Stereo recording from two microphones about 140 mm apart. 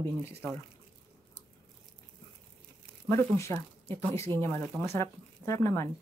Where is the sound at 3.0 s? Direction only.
20° left (ahead or behind).